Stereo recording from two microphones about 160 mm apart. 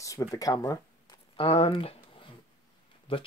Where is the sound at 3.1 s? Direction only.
35° left (ahead or behind).